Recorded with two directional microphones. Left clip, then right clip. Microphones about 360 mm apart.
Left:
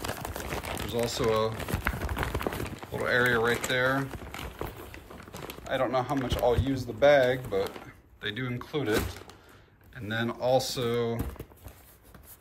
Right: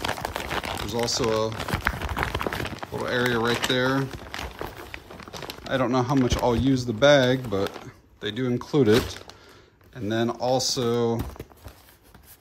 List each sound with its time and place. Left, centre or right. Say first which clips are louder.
0.0 s crumpling: right 7 dB; centre
2.6 s a sound: right 2 dB; centre
3.4 s crumpling: right 3 dB; centre
5.3 s speech: right 4 dB; centre
9.9 s speech: right 6 dB; centre